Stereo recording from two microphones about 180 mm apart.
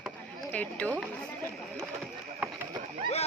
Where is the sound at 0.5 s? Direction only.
10° left (ahead or behind).